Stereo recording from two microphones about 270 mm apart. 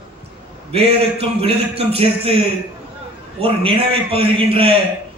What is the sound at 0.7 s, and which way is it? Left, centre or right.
A man's voice, right.